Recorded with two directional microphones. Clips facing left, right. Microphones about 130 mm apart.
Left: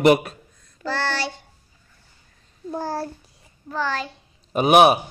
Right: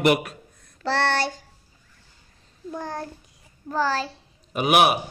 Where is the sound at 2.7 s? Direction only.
30° left (ahead or behind).